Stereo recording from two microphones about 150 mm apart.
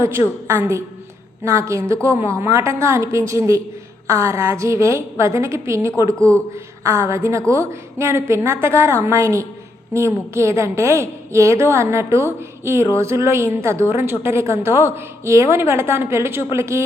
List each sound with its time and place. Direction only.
0.4 s a woman's voice: 20° right (ahead or behind)